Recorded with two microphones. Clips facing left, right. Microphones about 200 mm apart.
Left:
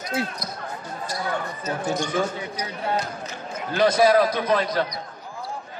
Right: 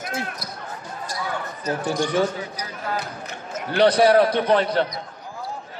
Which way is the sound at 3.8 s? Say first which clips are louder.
Right 2 dB; 35° right (ahead or behind).